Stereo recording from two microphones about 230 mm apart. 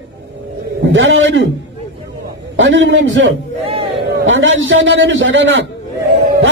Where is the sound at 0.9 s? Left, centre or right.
Right.